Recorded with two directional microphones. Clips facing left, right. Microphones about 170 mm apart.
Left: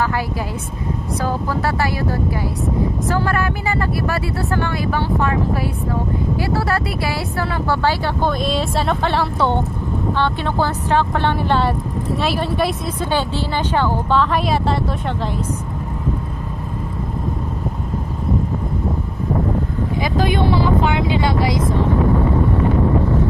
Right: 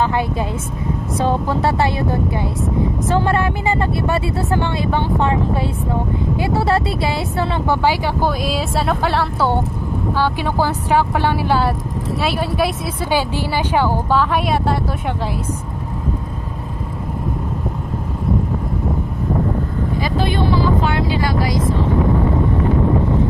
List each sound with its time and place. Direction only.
1.2 s speech: 25° right (ahead or behind); by 14.8 s centre (ahead or behind)